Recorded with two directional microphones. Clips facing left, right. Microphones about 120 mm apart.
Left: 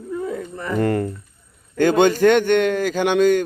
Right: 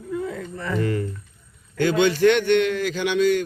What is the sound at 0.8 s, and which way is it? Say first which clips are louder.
A man's voice: left 6 dB; 55° left (ahead or behind).